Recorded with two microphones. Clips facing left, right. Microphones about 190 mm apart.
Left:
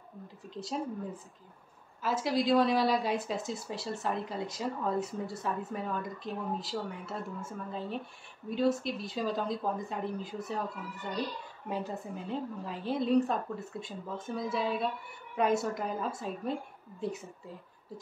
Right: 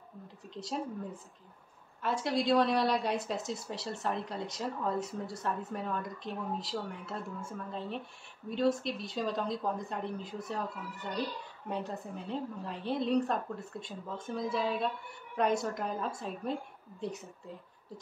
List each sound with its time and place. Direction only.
2.0 s speech: centre (ahead or behind)
11.7 s speech: centre (ahead or behind)